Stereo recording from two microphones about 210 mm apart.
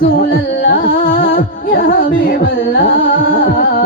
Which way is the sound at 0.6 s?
45° left (ahead or behind).